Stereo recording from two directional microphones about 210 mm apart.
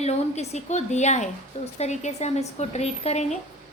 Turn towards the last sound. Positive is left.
turn(degrees=30)  # may be behind; listen again after turning